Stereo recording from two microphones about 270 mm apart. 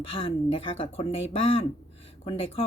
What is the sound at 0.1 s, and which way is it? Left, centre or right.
Speech, centre.